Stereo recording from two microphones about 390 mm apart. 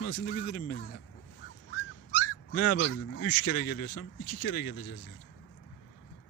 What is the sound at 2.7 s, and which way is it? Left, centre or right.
Speech, left.